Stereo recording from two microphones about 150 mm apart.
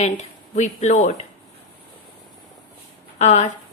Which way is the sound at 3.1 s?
50° left (ahead or behind).